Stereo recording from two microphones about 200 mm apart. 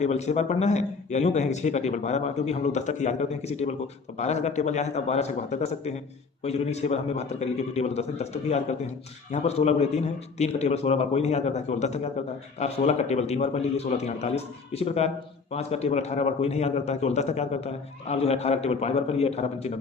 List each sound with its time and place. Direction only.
0.0 s a man's voice: 35° left (ahead or behind)